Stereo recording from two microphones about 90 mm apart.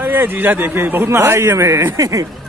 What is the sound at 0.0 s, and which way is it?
A man's voice, 20° right (ahead or behind).